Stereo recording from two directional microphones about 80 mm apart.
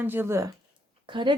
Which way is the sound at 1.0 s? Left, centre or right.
Right.